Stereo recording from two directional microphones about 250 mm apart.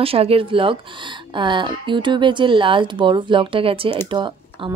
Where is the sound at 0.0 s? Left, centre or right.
Right.